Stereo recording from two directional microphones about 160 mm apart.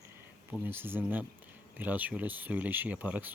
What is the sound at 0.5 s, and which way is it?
Speech, 10° right (ahead or behind).